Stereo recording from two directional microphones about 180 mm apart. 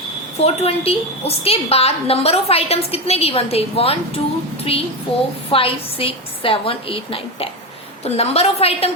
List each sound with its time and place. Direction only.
0.3 s a woman's voice: 35° left (ahead or behind)